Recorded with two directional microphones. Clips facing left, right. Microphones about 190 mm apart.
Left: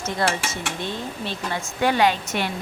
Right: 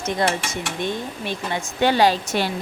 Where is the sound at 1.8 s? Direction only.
35° right (ahead or behind).